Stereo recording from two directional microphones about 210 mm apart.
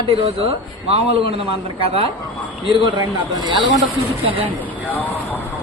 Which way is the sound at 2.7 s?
20° right (ahead or behind).